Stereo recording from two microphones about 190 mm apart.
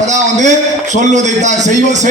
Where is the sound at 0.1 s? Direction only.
40° right (ahead or behind).